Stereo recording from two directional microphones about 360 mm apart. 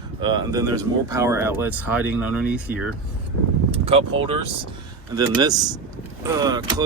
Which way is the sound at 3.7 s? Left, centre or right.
Centre.